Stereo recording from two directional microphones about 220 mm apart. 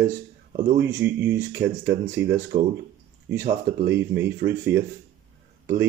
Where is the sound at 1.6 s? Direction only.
50° right (ahead or behind).